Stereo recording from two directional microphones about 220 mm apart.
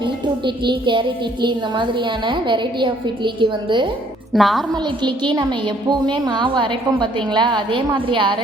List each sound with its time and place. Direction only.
0.0 s a woman's voice: 20° right (ahead or behind)
4.3 s a woman's voice: centre (ahead or behind)
4.7 s a woman's voice: 20° right (ahead or behind)